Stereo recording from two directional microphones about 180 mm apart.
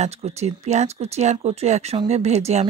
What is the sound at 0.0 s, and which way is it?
Speech, 35° right (ahead or behind).